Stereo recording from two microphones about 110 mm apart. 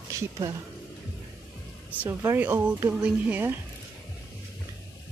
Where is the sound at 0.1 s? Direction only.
30° right (ahead or behind).